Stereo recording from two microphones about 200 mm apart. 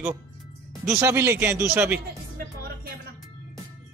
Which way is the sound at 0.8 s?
15° right (ahead or behind).